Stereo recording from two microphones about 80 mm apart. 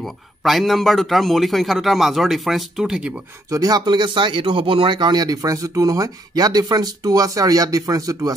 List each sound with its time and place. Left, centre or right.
0.4 s a man's voice: centre
3.4 s speech: right